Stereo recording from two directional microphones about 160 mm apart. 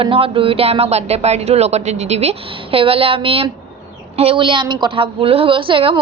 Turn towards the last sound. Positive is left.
turn(degrees=-35)  # may be behind; listen again after turning